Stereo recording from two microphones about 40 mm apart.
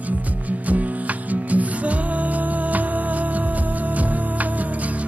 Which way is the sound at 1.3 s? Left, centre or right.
Right.